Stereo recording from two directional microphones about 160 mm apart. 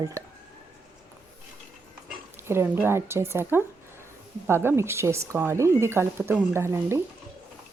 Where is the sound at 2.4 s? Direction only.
15° right (ahead or behind).